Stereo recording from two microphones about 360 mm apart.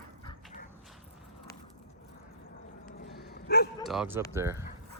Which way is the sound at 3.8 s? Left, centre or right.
Centre.